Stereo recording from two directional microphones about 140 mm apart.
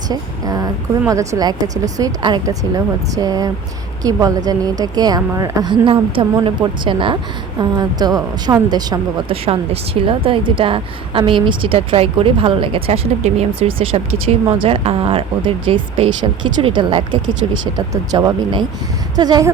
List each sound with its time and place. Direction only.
0.1 s a woman's voice: 25° right (ahead or behind)
5.8 s a woman's voice: 35° right (ahead or behind)
9.3 s a woman's voice: 40° right (ahead or behind)